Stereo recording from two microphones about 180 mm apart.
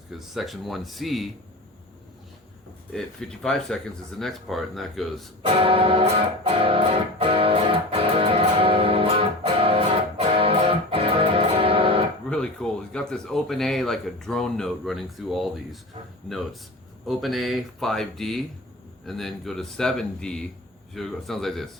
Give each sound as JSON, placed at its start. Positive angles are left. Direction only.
{"t": 0.1, "sound": "speech", "side_deg": 0}
{"t": 2.9, "sound": "speech", "side_deg": 0}
{"t": 5.5, "sound": "music", "side_deg": -30}
{"t": 12.3, "sound": "speech", "side_deg": 5}
{"t": 17.1, "sound": "speech", "side_deg": 0}